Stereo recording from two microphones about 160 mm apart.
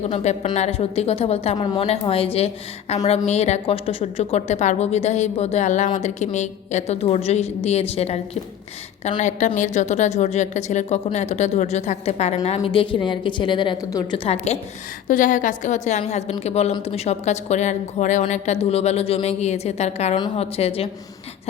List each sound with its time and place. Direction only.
0.1 s a woman's voice: 45° left (ahead or behind)
1.5 s a woman's voice: 30° left (ahead or behind)
15.0 s a woman's voice: 55° left (ahead or behind); by 20.9 s 40° left (ahead or behind)